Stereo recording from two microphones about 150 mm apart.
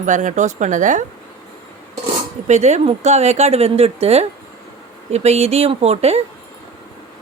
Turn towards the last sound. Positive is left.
turn(degrees=-45)  # may be behind; listen again after turning